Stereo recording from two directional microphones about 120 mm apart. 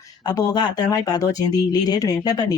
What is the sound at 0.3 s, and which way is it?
Speech, 35° left (ahead or behind).